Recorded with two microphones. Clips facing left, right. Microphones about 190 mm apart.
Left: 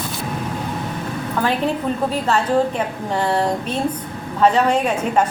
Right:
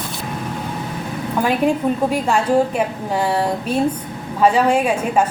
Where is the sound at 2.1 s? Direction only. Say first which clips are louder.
Even; 10° right (ahead or behind).